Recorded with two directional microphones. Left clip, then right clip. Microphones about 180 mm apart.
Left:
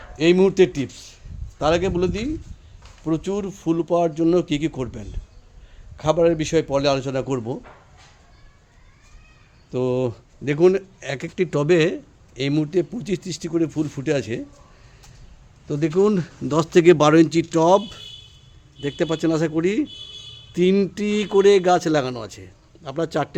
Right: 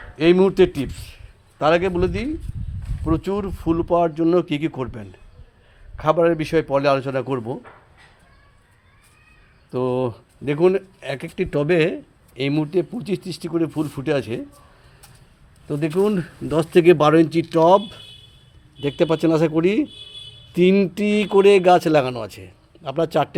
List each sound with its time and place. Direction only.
0.2 s a man's voice: 5° left (ahead or behind)
9.7 s speech: 15° left (ahead or behind)
15.6 s speech: 15° left (ahead or behind)
18.8 s speech: 5° right (ahead or behind)